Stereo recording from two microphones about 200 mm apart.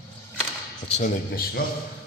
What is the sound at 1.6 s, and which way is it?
Speech, 45° left (ahead or behind).